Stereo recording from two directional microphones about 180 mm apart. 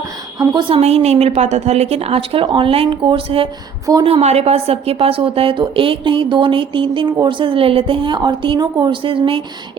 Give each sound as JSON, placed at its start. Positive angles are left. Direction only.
{"t": 0.3, "sound": "a woman's voice", "side_deg": -25}
{"t": 0.8, "sound": "a woman's voice", "side_deg": -35}